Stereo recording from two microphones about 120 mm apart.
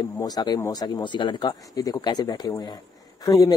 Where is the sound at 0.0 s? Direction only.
35° left (ahead or behind).